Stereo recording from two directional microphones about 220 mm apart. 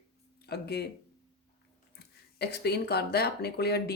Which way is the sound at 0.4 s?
45° left (ahead or behind).